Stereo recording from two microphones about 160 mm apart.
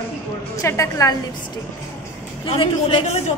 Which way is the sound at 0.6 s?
20° left (ahead or behind).